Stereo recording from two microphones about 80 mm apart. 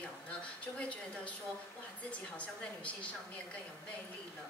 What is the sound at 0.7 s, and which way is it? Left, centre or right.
Speech, centre.